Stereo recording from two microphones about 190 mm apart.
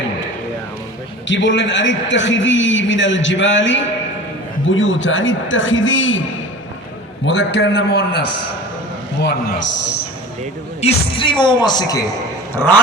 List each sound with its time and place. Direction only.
1.3 s a man's voice: 75° left (ahead or behind); by 6.2 s 90° left
7.3 s a man's voice: 65° left (ahead or behind)
10.8 s speech: 30° left (ahead or behind)
12.5 s dog: 10° left (ahead or behind)